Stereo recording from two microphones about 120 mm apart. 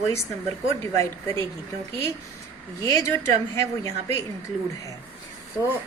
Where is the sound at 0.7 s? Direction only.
20° left (ahead or behind).